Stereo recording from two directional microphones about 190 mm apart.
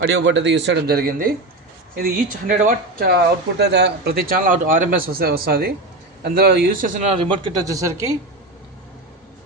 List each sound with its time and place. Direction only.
0.0 s a man's voice: 75° right (ahead or behind); by 7.0 s 45° right (ahead or behind)
7.1 s speech: 30° right (ahead or behind)